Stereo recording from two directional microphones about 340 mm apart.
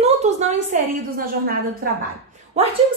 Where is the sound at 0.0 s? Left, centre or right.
Centre.